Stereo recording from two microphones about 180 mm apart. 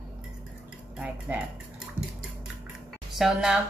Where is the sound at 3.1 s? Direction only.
Centre (ahead or behind).